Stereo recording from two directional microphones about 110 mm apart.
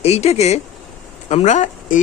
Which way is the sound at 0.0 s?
70° left (ahead or behind).